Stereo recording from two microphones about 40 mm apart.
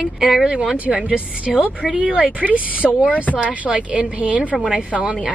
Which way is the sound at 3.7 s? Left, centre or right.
Right.